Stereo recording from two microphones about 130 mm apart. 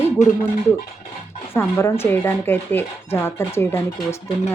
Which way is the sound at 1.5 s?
15° left (ahead or behind).